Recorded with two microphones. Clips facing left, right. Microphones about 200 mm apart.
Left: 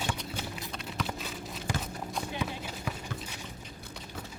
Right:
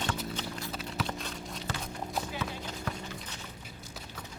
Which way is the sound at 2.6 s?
10° left (ahead or behind).